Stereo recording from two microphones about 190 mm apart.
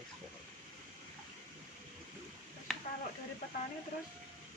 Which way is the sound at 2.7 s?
Centre (ahead or behind).